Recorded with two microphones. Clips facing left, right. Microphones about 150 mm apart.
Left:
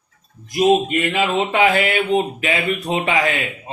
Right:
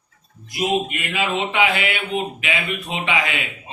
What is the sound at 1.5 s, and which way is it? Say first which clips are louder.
Speech: left 4 dB; 40° left (ahead or behind).